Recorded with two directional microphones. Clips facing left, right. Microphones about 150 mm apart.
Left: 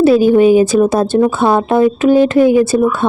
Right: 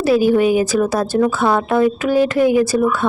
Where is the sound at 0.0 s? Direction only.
25° left (ahead or behind).